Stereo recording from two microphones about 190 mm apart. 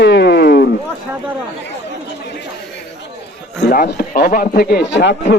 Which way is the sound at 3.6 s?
55° left (ahead or behind).